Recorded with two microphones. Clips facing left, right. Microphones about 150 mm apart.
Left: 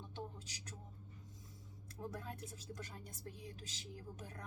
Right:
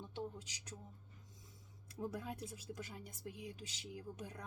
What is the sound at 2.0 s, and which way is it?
Speech, 10° right (ahead or behind).